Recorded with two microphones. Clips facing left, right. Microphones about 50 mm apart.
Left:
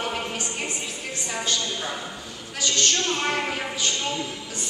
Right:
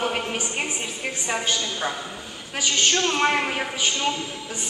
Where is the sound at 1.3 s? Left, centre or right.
Right.